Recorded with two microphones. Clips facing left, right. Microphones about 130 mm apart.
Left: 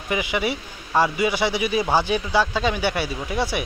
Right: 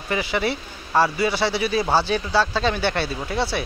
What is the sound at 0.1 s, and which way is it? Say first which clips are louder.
A man's voice: even; 15° left (ahead or behind).